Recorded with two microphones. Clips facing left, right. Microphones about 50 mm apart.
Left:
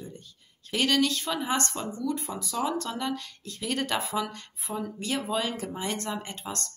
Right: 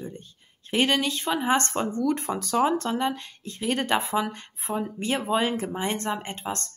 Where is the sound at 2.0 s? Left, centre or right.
Right.